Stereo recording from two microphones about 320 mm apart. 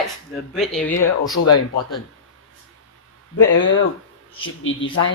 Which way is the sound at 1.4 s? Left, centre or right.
Left.